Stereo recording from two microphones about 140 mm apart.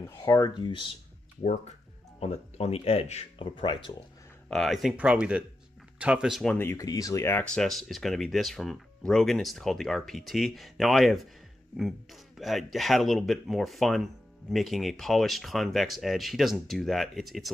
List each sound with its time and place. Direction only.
0.1 s speech: 25° left (ahead or behind)
1.4 s speech: 60° left (ahead or behind); by 4.0 s 35° left (ahead or behind)
4.5 s speech: centre (ahead or behind)
6.4 s speech: 15° left (ahead or behind); by 17.5 s centre (ahead or behind)